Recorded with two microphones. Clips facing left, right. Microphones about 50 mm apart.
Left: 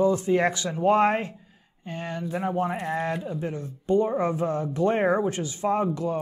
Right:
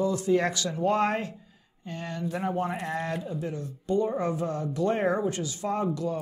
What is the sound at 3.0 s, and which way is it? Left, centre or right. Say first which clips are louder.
Speech: left 3 dB; left.